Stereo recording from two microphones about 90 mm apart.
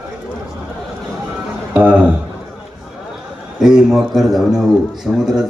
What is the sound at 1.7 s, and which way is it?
Speech, 15° right (ahead or behind).